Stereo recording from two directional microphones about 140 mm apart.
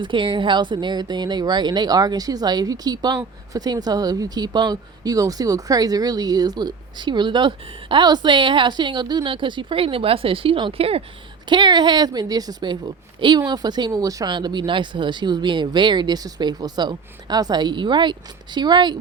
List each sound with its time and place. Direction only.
0.0 s speech: 35° right (ahead or behind)
11.4 s speech: 35° right (ahead or behind)